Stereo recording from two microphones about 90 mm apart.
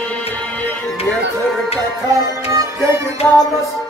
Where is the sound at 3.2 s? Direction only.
10° left (ahead or behind).